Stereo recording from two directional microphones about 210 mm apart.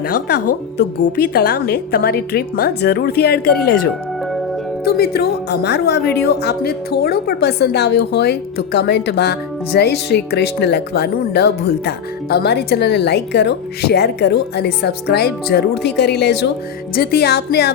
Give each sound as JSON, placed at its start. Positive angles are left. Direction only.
{"t": 0.1, "sound": "a woman's voice", "side_deg": 45}
{"t": 4.9, "sound": "a woman's voice", "side_deg": 50}